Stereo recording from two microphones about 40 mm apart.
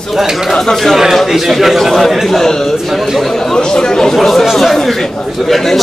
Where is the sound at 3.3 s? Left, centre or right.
Centre.